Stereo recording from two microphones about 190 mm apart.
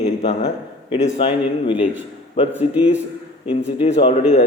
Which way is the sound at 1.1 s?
30° left (ahead or behind).